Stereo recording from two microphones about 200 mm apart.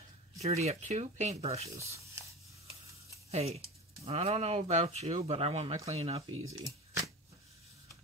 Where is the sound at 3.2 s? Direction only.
30° right (ahead or behind).